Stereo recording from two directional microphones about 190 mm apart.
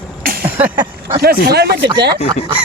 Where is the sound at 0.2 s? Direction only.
50° right (ahead or behind).